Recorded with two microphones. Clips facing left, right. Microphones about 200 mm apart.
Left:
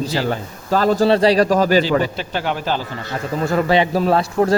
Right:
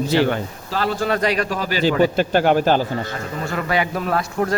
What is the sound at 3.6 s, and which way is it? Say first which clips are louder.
Speech: left 4 dB; 30° left (ahead or behind).